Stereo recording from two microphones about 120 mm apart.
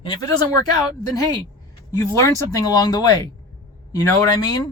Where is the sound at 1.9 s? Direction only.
25° left (ahead or behind).